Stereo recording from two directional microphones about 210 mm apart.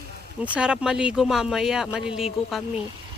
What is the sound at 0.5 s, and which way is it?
Speech, 5° right (ahead or behind).